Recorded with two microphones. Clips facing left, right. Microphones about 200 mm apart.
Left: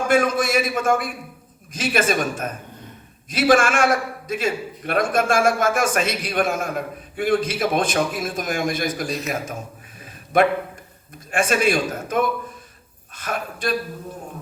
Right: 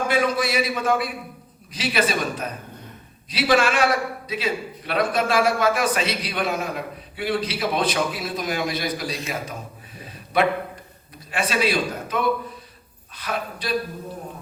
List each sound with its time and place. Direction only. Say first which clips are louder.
0.1 s a man's voice: left 5 dB; 50° left (ahead or behind)
10.3 s a man's voice: left 3 dB; 50° left (ahead or behind)